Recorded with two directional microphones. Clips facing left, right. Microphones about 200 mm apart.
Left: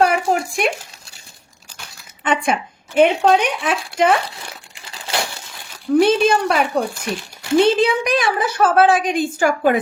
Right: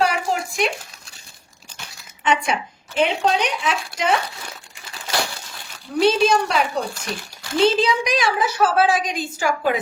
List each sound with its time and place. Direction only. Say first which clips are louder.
0.0 s a sound: left 5 dB; 55° left (ahead or behind)
2.2 s a woman's voice: left 2 dB; 50° left (ahead or behind)
6.0 s a woman's voice: left 1 dB; 55° left (ahead or behind)